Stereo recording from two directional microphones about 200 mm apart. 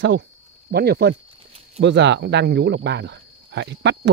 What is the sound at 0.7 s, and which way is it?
Speech, 55° right (ahead or behind).